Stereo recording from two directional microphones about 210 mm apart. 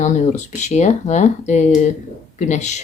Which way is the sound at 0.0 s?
35° left (ahead or behind).